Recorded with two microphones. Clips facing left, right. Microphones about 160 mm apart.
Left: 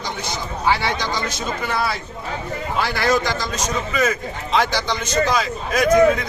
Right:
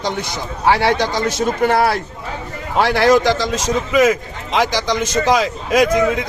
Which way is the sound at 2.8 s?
90° right.